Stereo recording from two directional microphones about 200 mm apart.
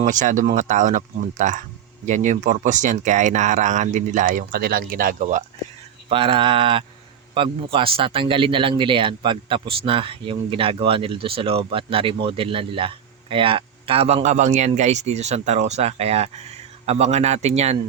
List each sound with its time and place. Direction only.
0.0 s speech: 40° right (ahead or behind)
6.1 s speech: 25° right (ahead or behind)